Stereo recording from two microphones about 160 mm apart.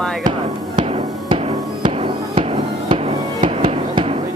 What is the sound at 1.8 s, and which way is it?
Fireworks, 30° right (ahead or behind).